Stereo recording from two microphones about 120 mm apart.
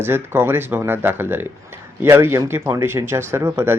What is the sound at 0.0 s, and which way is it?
Speech, 20° right (ahead or behind).